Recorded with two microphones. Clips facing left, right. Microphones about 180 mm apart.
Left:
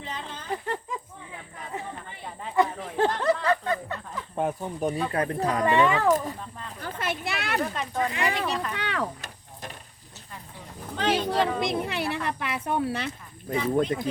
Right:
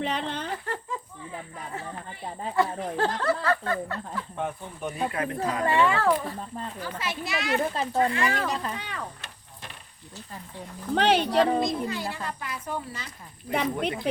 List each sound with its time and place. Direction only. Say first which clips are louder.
0.0 s music: right 8 dB; 70° right (ahead or behind)
0.5 s a sound: left 2 dB; 15° left (ahead or behind)
2.6 s speech: left 2 dB; 20° left (ahead or behind)
4.4 s speech: left 7 dB; 40° left (ahead or behind)
5.6 s speech: left 1 dB; 15° left (ahead or behind)
6.8 s a child's voice: left 5 dB; 55° left (ahead or behind)
7.6 s speech: right 4 dB; 30° right (ahead or behind)
8.1 s speech: right 1 dB; 15° left (ahead or behind)
8.7 s speech: left 6 dB; 80° left
10.9 s speech: right 3 dB; 70° right (ahead or behind)
11.6 s speech: left 1 dB; 70° left (ahead or behind)
13.5 s speech: left 2 dB; 70° right (ahead or behind)